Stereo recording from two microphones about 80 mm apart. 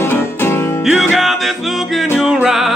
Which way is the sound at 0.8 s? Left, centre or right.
Centre.